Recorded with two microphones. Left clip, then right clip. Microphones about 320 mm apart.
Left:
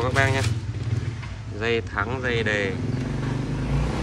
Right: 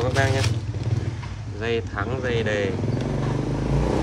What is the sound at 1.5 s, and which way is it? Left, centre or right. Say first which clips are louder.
Speech: left 2 dB; centre.